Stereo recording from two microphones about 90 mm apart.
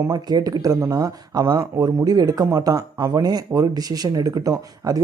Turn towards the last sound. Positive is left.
turn(degrees=-40)  # may be behind; listen again after turning